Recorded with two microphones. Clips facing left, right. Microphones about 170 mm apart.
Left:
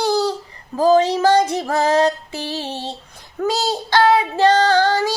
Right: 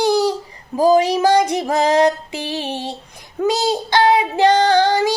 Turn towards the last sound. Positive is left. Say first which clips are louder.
# right 2 dB
turn(degrees=-15)  # may be behind; listen again after turning